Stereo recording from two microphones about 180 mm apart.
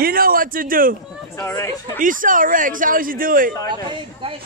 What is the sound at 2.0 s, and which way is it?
A man's voice, 50° right (ahead or behind).